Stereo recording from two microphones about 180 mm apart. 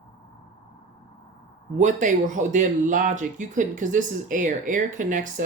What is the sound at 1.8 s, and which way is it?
Speech, 45° right (ahead or behind).